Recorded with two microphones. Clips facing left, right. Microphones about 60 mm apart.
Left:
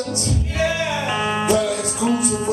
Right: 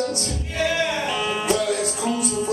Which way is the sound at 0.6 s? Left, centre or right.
Centre.